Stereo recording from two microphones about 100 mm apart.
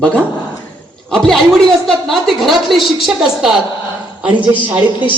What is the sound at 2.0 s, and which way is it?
A woman's voice, centre (ahead or behind).